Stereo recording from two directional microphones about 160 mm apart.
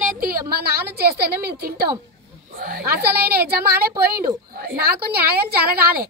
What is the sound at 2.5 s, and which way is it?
A woman's voice, 65° right (ahead or behind).